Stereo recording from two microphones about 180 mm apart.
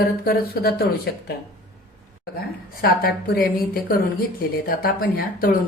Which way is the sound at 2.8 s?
55° left (ahead or behind).